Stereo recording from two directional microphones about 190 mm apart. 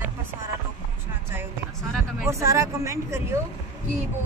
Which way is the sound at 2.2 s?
15° right (ahead or behind).